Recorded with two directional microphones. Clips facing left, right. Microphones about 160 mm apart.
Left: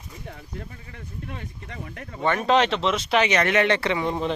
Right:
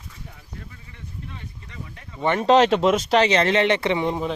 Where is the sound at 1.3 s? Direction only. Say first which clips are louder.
Left 4 dB; 40° left (ahead or behind).